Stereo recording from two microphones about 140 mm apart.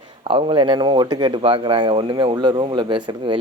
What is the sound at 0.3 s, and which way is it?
Speech, 40° right (ahead or behind).